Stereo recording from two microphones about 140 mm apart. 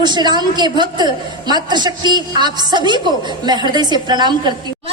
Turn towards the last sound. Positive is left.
turn(degrees=-30)  # may be behind; listen again after turning